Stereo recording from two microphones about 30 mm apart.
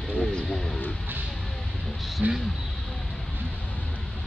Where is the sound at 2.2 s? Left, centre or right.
Right.